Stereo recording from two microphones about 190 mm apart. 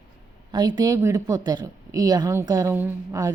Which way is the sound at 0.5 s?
20° right (ahead or behind).